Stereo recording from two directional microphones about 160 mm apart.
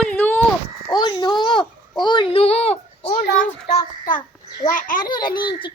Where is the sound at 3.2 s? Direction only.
65° left (ahead or behind).